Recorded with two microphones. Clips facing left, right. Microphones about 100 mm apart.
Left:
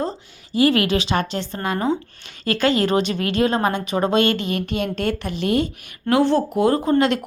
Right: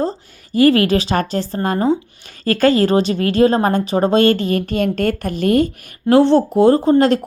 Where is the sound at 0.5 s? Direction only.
40° right (ahead or behind).